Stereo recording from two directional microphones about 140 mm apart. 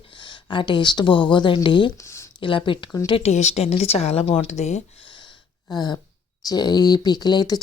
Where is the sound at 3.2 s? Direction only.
50° left (ahead or behind).